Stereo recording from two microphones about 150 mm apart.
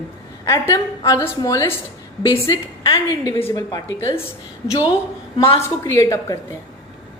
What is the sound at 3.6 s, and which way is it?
Speech, 25° left (ahead or behind).